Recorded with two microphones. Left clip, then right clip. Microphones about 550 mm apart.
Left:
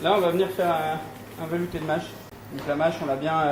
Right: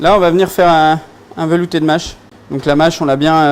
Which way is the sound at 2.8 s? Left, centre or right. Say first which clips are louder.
Right 11 dB; right.